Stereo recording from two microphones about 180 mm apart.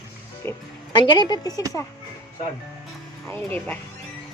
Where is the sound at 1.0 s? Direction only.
25° left (ahead or behind).